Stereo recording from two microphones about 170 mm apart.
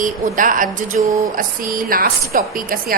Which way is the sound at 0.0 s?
50° right (ahead or behind).